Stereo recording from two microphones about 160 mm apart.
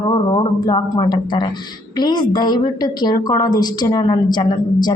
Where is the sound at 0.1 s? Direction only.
25° left (ahead or behind).